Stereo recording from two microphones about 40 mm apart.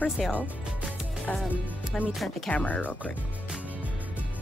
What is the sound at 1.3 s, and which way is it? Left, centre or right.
Speech, centre.